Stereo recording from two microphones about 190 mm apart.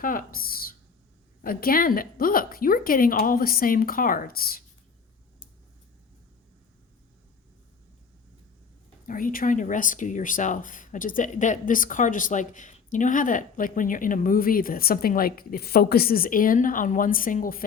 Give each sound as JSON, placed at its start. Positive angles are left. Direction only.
{"t": 0.0, "sound": "speech", "side_deg": 45}
{"t": 9.0, "sound": "speech", "side_deg": 45}